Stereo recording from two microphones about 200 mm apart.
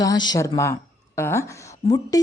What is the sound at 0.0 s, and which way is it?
A woman's voice, 20° left (ahead or behind).